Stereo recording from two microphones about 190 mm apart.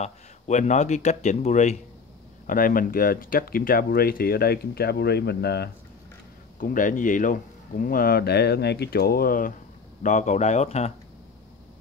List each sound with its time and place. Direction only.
0.0 s speech: 40° left (ahead or behind); by 5.7 s 60° left (ahead or behind)
6.6 s speech: 45° left (ahead or behind)
10.0 s speech: 40° left (ahead or behind)